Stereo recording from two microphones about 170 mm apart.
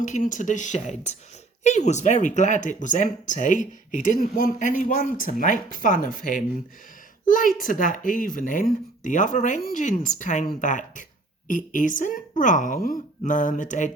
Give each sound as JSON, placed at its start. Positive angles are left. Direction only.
{"t": 0.0, "sound": "speech", "side_deg": 50}